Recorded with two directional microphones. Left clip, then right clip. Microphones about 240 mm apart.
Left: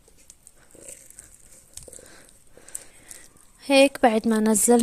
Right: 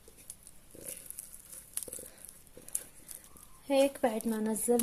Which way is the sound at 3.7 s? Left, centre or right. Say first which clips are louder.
Left 11 dB; left.